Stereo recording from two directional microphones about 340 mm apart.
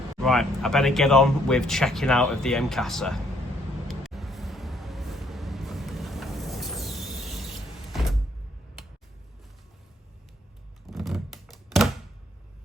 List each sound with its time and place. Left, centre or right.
0.2 s speech: centre
3.8 s vehicle: centre
10.8 s typewriter: centre